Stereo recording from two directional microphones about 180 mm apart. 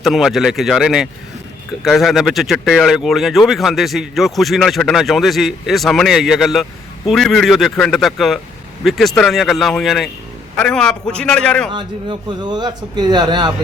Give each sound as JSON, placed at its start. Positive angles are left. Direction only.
{"t": 0.0, "sound": "speech", "side_deg": 0}
{"t": 11.7, "sound": "a man's voice", "side_deg": -25}